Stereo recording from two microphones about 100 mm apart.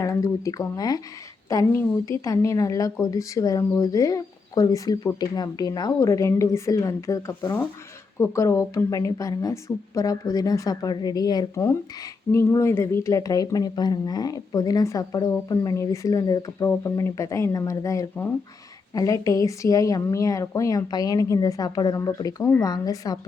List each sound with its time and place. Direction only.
0.0 s speech: 30° left (ahead or behind)
11.5 s speech: 30° left (ahead or behind)